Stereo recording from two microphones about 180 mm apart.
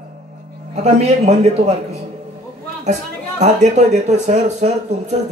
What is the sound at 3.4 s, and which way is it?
Speech, 40° right (ahead or behind).